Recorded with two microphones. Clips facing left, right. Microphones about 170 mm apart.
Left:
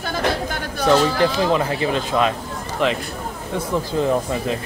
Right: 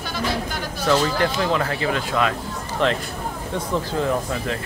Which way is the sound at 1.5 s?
20° left (ahead or behind).